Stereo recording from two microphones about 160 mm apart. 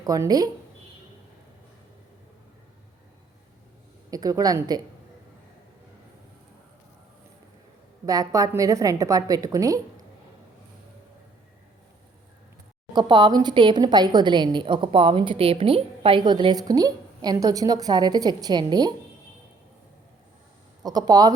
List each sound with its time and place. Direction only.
0.0 s a woman's voice: 20° right (ahead or behind)
4.1 s a woman's voice: 20° right (ahead or behind)
8.0 s a woman's voice: 20° right (ahead or behind)
12.9 s a woman's voice: 30° right (ahead or behind)
20.8 s a woman's voice: 25° right (ahead or behind)